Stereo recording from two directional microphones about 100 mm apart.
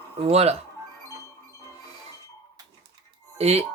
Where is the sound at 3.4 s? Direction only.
90° right.